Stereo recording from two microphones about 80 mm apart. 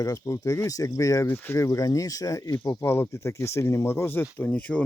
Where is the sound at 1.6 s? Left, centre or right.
Left.